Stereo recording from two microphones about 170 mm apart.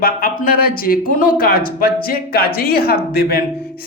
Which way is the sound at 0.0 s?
55° left (ahead or behind).